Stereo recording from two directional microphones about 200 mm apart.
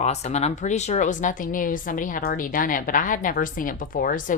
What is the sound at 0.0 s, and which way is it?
Speech, 35° left (ahead or behind).